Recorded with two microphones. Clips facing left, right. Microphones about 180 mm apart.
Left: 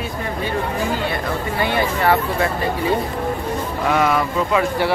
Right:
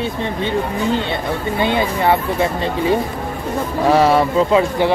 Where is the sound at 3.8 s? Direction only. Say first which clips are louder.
Right 5 dB; 35° right (ahead or behind).